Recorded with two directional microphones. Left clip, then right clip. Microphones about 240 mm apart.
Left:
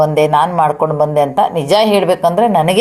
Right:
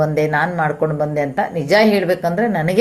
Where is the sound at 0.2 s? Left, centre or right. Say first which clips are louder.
Left 6 dB; left.